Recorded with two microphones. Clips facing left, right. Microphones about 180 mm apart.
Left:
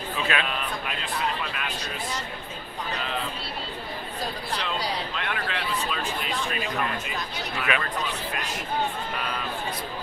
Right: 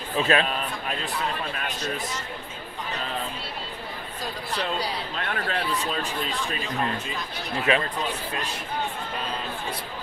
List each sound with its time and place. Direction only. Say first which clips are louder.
0.2 s a sound: right 6 dB; 40° right (ahead or behind)
1.5 s speech: right 2 dB; 35° right (ahead or behind)
5.1 s speech: right 2 dB; 40° right (ahead or behind)